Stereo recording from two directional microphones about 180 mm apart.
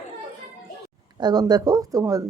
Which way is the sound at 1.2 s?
20° right (ahead or behind).